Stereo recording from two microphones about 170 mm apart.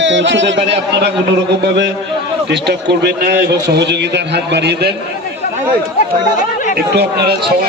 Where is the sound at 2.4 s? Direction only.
80° right.